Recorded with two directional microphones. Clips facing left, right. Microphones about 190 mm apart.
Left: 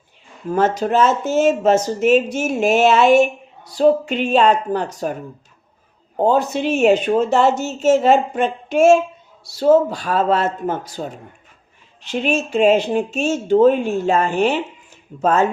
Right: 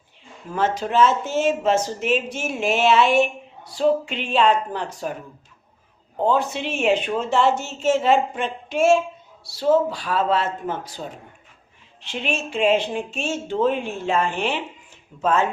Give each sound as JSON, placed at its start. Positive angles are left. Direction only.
{"t": 0.5, "sound": "speech", "side_deg": 45}
{"t": 6.1, "sound": "speech", "side_deg": 40}
{"t": 12.0, "sound": "speech", "side_deg": 40}